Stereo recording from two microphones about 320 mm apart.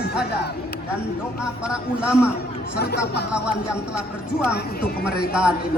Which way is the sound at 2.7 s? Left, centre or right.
Left.